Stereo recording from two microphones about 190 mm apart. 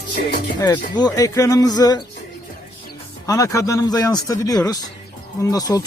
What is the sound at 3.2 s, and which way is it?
Speech, 15° left (ahead or behind).